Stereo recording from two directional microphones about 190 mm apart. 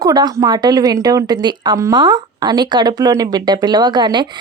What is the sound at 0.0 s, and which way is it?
A woman's voice, 20° right (ahead or behind).